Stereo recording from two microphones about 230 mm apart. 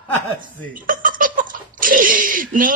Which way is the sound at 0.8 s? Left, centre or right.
Right.